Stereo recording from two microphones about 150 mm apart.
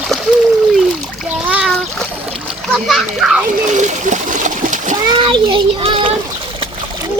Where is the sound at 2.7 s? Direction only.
Centre (ahead or behind).